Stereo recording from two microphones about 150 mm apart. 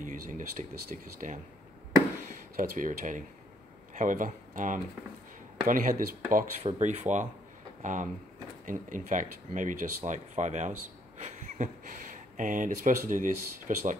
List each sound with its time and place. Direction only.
0.0 s speech: 60° right (ahead or behind)
2.5 s speech: 65° right (ahead or behind)
6.6 s speech: 45° right (ahead or behind)